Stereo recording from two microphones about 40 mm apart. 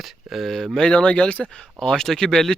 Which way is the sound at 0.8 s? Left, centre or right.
Left.